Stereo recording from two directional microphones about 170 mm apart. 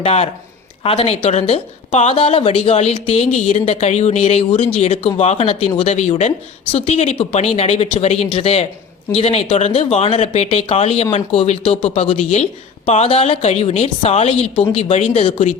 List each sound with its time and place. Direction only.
0.0 s speech: 40° left (ahead or behind)